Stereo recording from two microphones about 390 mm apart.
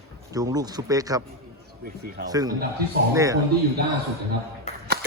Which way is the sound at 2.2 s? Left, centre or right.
Centre.